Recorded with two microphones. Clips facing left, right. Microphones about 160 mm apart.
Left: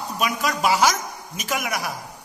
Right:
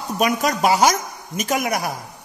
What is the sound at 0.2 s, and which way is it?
Speech, 45° right (ahead or behind).